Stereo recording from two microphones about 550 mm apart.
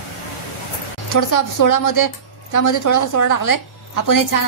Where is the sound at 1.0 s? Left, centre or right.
Left.